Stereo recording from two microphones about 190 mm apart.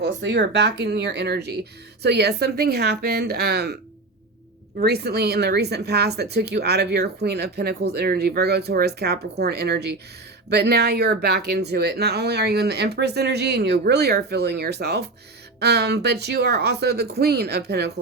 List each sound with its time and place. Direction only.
0.0 s speech: 65° right (ahead or behind)
4.8 s speech: 55° right (ahead or behind)